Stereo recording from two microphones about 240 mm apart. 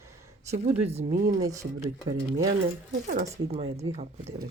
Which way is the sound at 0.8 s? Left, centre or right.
Right.